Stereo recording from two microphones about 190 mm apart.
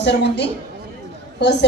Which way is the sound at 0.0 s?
65° left (ahead or behind).